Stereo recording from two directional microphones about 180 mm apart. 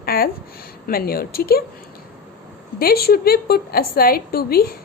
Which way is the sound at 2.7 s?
55° left (ahead or behind).